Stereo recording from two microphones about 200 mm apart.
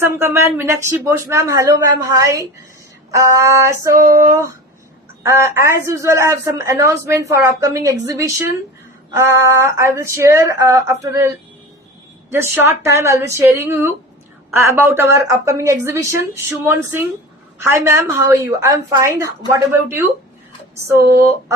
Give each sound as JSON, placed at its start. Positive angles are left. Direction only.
{"t": 0.0, "sound": "a woman's voice", "side_deg": -15}
{"t": 12.3, "sound": "a woman's voice", "side_deg": -15}
{"t": 20.8, "sound": "a woman's voice", "side_deg": -15}